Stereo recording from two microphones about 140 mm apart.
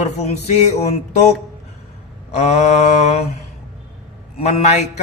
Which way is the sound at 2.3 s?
50° left (ahead or behind).